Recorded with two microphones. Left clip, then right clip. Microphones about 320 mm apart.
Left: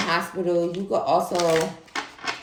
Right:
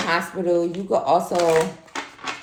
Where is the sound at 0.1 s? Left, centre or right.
Centre.